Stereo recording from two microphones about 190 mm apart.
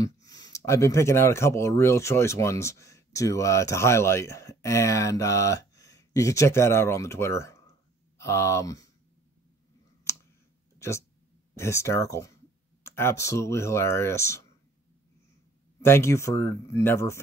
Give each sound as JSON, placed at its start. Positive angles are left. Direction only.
{"t": 0.0, "sound": "speech", "side_deg": 20}
{"t": 10.1, "sound": "clicking", "side_deg": 15}
{"t": 10.8, "sound": "speech", "side_deg": 15}
{"t": 15.8, "sound": "speech", "side_deg": 15}